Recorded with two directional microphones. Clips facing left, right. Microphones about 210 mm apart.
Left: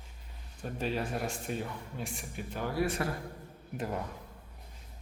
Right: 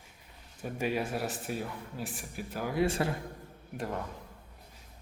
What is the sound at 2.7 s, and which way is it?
Speech, 25° right (ahead or behind).